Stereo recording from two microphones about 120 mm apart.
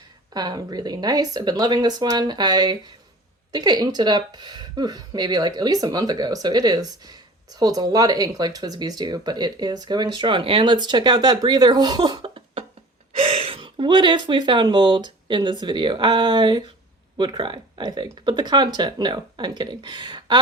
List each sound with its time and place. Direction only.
0.3 s speech: 35° right (ahead or behind)